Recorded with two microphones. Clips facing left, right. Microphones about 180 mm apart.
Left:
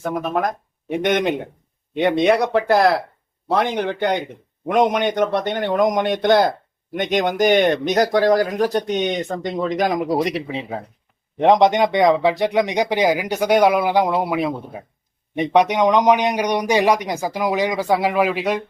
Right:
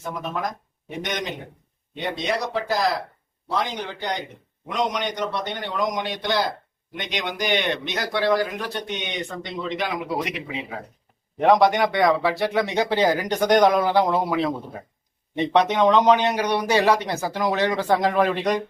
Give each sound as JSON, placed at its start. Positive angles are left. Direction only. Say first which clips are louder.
{"t": 0.0, "sound": "speech", "louder": "left 7 dB", "side_deg": 50}
{"t": 11.3, "sound": "a man's voice", "louder": "left 3 dB", "side_deg": 20}